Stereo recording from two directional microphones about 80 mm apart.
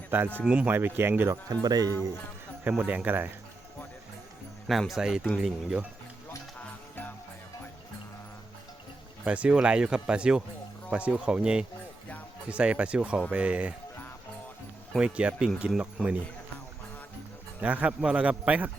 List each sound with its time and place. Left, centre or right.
0.1 s speech: right
0.4 s speech: centre
0.7 s speech: right
1.6 s speech: right
2.6 s speech: centre
4.7 s speech: centre
9.2 s speech: centre
14.9 s speech: centre
17.6 s speech: centre